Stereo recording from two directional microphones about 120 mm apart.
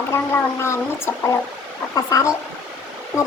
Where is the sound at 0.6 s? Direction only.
20° left (ahead or behind).